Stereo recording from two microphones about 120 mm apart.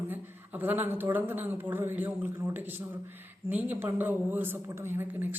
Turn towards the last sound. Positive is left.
turn(degrees=-15)  # may be behind; listen again after turning